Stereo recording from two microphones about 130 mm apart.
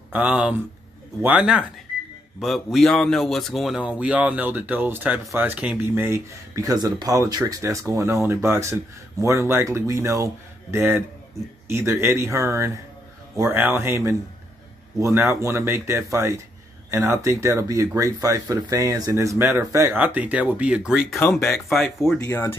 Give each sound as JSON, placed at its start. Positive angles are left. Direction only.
{"t": 0.1, "sound": "speech", "side_deg": -10}
{"t": 20.0, "sound": "speech", "side_deg": -10}
{"t": 21.2, "sound": "speech", "side_deg": 20}
{"t": 22.0, "sound": "speech", "side_deg": 0}
{"t": 22.3, "sound": "speech", "side_deg": 20}